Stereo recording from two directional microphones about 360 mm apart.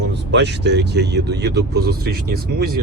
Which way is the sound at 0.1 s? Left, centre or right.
Right.